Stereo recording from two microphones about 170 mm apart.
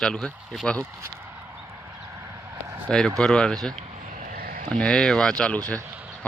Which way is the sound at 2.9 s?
5° left (ahead or behind).